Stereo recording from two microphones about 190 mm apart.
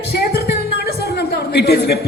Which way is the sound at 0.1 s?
55° left (ahead or behind).